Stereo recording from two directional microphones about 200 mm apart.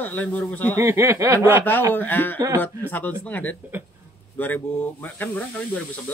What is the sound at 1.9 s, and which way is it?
Speech, 10° left (ahead or behind).